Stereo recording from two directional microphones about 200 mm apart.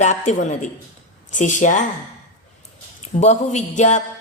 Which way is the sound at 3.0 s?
35° left (ahead or behind).